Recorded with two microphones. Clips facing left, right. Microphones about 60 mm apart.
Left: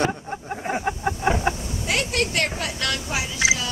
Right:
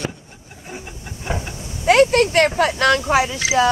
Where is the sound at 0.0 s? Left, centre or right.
Left.